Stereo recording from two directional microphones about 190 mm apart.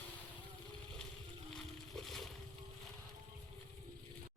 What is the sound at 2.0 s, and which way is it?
Splash, centre (ahead or behind).